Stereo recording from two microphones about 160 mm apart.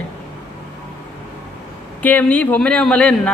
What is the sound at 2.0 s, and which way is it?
A woman's voice, 10° left (ahead or behind).